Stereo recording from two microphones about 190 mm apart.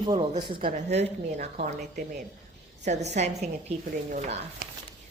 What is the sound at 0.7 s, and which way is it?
A woman's voice, 40° right (ahead or behind).